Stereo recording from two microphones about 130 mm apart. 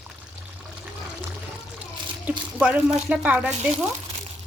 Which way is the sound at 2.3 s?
15° right (ahead or behind).